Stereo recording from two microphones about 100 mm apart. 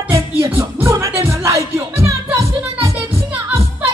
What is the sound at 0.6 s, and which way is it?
Music, 25° right (ahead or behind).